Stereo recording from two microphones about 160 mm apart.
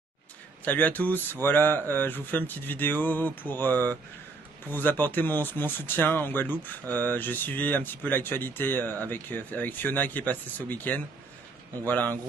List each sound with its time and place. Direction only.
0.7 s speech: 10° left (ahead or behind)